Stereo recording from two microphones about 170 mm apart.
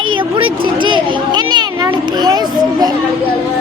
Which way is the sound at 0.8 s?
30° right (ahead or behind).